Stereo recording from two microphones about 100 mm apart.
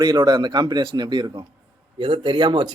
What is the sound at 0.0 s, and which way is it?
Speech, 45° right (ahead or behind).